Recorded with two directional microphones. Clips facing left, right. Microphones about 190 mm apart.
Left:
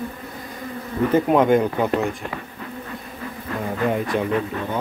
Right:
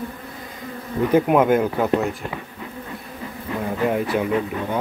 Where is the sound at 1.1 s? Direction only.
5° right (ahead or behind).